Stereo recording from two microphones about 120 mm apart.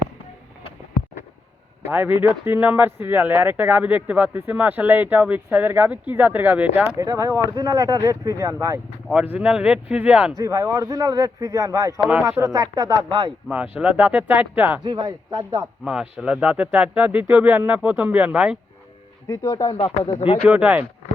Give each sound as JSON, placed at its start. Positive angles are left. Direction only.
{"t": 1.9, "sound": "speech", "side_deg": -15}
{"t": 6.9, "sound": "speech", "side_deg": -25}
{"t": 9.3, "sound": "speech", "side_deg": -5}
{"t": 10.3, "sound": "speech", "side_deg": -25}
{"t": 13.5, "sound": "speech", "side_deg": -10}
{"t": 14.8, "sound": "speech", "side_deg": -35}
{"t": 15.8, "sound": "speech", "side_deg": -5}
{"t": 19.3, "sound": "speech", "side_deg": 30}
{"t": 20.2, "sound": "speech", "side_deg": 45}
{"t": 20.5, "sound": "speech", "side_deg": -10}